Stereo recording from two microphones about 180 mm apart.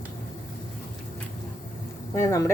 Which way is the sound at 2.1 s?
15° left (ahead or behind).